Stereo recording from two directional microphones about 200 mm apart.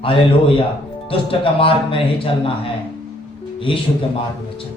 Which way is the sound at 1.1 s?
25° left (ahead or behind).